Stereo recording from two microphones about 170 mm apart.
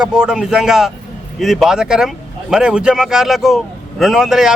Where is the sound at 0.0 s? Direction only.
5° right (ahead or behind).